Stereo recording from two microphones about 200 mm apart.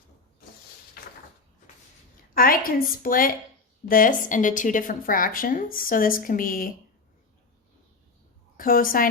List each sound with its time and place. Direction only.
1.0 s a sound: 50° left (ahead or behind)
2.3 s a woman's voice: 45° left (ahead or behind)
8.5 s a woman's voice: 45° left (ahead or behind)